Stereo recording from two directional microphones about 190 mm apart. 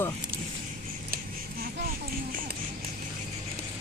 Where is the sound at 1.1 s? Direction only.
50° right (ahead or behind).